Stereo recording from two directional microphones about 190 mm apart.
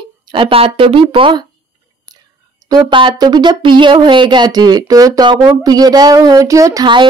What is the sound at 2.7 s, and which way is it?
Speech, 25° right (ahead or behind).